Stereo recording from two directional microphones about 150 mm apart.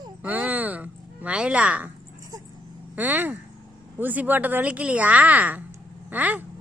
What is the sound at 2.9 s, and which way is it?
Speech, 10° right (ahead or behind).